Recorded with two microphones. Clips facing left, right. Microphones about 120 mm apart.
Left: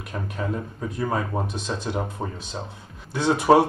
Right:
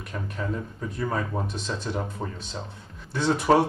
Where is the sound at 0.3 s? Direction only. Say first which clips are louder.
Left 2 dB; 10° left (ahead or behind).